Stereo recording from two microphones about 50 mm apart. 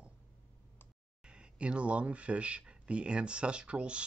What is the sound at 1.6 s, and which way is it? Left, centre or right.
Speech, right.